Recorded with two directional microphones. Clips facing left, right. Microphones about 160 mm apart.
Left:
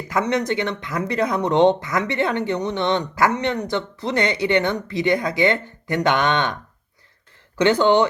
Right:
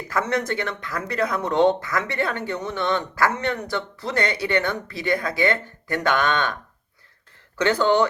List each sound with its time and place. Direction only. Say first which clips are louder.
0.1 s speech: left 3 dB; 20° left (ahead or behind)
7.6 s speech: left 3 dB; 20° left (ahead or behind)